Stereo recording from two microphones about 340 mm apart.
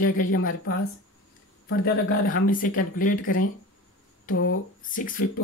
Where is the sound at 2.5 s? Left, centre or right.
Left.